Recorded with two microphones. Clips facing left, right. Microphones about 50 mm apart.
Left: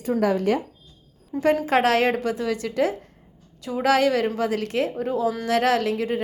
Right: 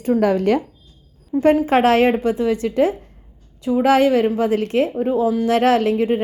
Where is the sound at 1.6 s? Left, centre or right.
Right.